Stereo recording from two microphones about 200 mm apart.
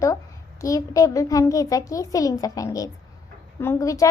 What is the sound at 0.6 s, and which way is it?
A child's voice, 15° left (ahead or behind).